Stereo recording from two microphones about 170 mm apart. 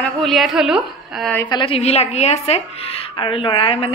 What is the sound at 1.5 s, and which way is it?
A woman's voice, 30° left (ahead or behind).